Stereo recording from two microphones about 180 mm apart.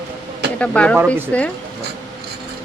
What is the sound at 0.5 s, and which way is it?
Speech, 5° left (ahead or behind).